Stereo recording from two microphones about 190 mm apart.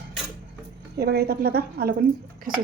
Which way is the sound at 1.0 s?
55° right (ahead or behind).